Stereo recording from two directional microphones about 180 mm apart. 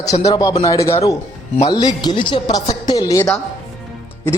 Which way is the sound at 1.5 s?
20° left (ahead or behind).